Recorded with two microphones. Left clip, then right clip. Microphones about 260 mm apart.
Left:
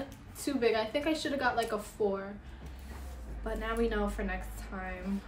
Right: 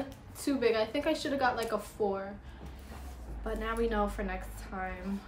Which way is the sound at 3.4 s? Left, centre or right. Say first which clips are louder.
Even; centre.